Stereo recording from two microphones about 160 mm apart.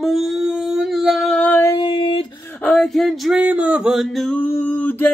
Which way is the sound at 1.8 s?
30° left (ahead or behind).